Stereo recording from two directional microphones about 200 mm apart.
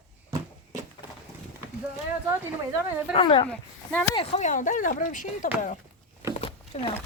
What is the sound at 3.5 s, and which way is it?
Speech, 5° left (ahead or behind).